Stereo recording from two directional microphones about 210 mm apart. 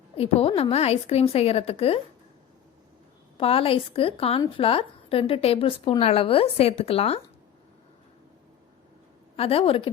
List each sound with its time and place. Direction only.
0.2 s a woman's voice: 30° left (ahead or behind)
3.3 s a woman's voice: 25° left (ahead or behind)
9.3 s a woman's voice: 25° left (ahead or behind)